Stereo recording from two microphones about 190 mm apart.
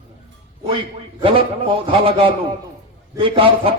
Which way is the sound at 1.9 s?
30° right (ahead or behind).